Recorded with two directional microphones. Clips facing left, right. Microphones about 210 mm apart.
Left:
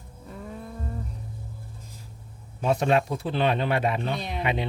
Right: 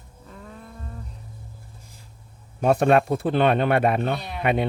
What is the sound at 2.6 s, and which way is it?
Speech, 55° right (ahead or behind).